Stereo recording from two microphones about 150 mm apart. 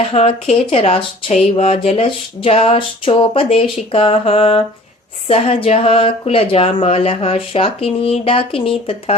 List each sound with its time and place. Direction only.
0.1 s speech: 45° left (ahead or behind)